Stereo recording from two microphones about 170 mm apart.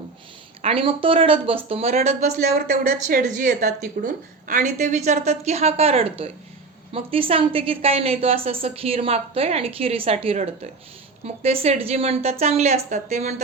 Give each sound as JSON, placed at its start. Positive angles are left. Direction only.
{"t": 0.6, "sound": "a woman's voice", "side_deg": -35}
{"t": 2.4, "sound": "a woman's voice", "side_deg": -65}